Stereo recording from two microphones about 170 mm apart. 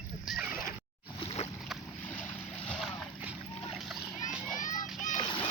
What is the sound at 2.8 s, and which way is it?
Boat, centre (ahead or behind).